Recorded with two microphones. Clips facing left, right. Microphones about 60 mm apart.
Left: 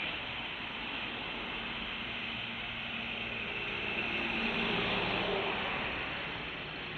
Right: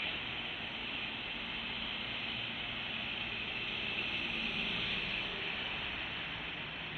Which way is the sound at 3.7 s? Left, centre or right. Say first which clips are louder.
Left 5 dB; left.